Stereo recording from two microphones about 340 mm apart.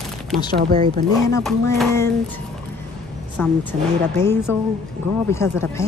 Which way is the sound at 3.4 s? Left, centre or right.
Centre.